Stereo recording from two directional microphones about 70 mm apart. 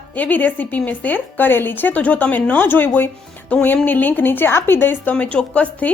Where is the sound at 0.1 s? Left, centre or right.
Left.